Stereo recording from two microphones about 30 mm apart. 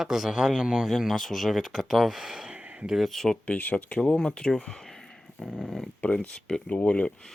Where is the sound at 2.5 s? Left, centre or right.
Right.